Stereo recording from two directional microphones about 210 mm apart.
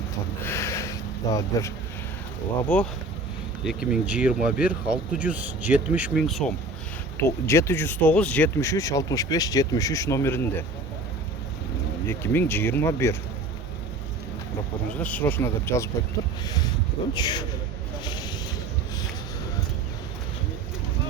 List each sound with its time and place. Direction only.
0.4 s a sound: 15° left (ahead or behind)
2.7 s speech: 5° left (ahead or behind)
7.2 s speech: 10° left (ahead or behind)
12.0 s speech: 10° left (ahead or behind)
15.0 s speech: 10° left (ahead or behind)
17.2 s a man's voice: 20° left (ahead or behind)
18.0 s a sound: 20° left (ahead or behind)